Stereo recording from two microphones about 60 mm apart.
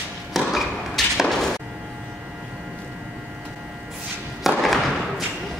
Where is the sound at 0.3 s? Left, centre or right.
Centre.